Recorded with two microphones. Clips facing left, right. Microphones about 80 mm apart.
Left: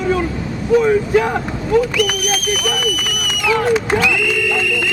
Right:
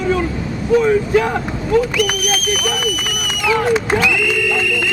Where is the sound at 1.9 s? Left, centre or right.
Right.